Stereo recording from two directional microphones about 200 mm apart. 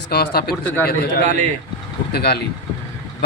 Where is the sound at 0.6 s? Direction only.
10° left (ahead or behind).